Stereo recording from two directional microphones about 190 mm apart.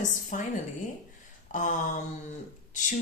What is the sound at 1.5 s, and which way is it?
Speech, 40° left (ahead or behind).